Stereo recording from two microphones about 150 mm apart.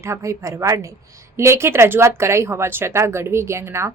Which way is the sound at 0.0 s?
20° right (ahead or behind).